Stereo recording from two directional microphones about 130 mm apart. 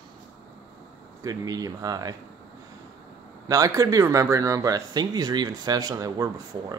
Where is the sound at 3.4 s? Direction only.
25° right (ahead or behind).